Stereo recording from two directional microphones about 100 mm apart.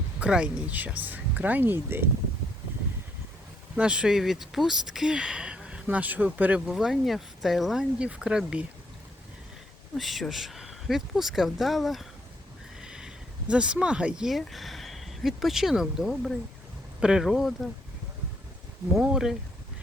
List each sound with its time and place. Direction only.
0.2 s speech: 10° right (ahead or behind)
3.8 s speech: 10° right (ahead or behind)
6.7 s speech: centre (ahead or behind)
10.0 s speech: centre (ahead or behind)
18.9 s speech: 5° right (ahead or behind)